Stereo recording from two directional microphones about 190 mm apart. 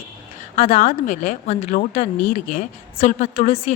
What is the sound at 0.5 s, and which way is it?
Speech, 30° left (ahead or behind).